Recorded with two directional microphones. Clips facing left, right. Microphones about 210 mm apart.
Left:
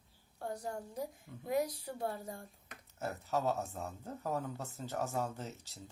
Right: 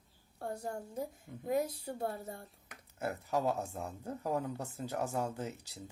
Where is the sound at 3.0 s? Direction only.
10° right (ahead or behind).